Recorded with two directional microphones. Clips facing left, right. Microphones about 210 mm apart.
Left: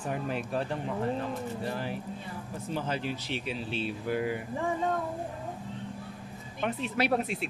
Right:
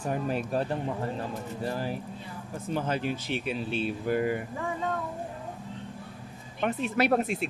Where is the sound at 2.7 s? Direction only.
50° right (ahead or behind).